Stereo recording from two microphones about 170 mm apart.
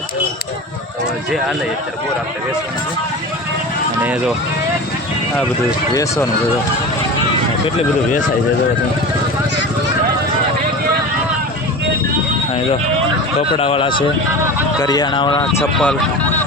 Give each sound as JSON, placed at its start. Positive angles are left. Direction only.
{"t": 5.9, "sound": "speech", "side_deg": 20}
{"t": 13.5, "sound": "speech", "side_deg": 35}
{"t": 14.8, "sound": "speech", "side_deg": 25}
{"t": 15.8, "sound": "speech", "side_deg": 5}